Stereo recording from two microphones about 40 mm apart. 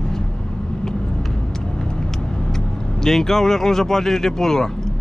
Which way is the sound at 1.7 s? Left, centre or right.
Centre.